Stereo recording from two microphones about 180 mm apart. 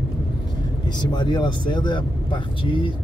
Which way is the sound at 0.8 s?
25° left (ahead or behind).